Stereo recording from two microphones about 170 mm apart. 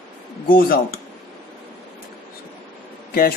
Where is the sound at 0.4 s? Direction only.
60° left (ahead or behind).